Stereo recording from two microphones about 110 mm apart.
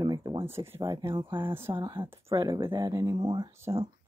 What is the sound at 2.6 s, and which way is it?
Speech, 45° right (ahead or behind).